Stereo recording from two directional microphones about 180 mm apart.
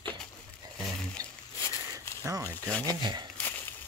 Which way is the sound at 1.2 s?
20° right (ahead or behind).